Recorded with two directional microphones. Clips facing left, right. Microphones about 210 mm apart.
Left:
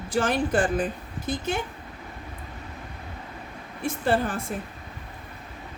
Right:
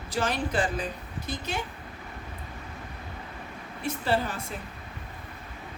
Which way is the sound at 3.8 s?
50° left (ahead or behind).